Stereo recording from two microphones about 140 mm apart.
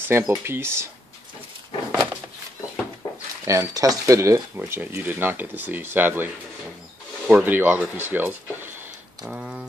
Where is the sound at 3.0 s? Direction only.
30° left (ahead or behind).